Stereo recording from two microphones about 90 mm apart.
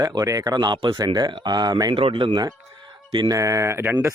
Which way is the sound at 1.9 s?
90° right.